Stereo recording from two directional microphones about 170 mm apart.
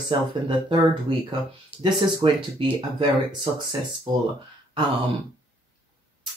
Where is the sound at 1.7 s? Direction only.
10° right (ahead or behind).